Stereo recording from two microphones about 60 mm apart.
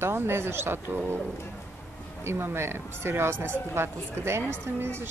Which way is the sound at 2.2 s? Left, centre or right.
Right.